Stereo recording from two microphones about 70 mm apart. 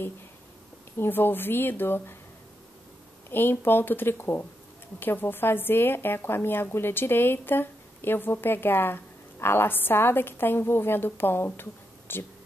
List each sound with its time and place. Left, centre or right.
0.9 s speech: left
3.3 s speech: left